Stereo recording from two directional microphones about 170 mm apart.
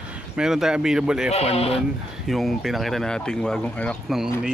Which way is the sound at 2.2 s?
Centre (ahead or behind).